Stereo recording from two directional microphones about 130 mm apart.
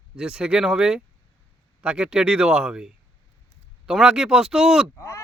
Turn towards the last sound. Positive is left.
turn(degrees=20)  # may be behind; listen again after turning